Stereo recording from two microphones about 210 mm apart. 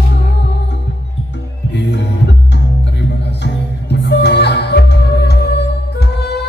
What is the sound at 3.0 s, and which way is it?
Music, 55° left (ahead or behind).